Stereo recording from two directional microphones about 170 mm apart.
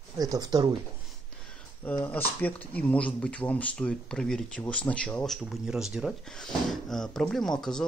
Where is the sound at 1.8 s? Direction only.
10° left (ahead or behind).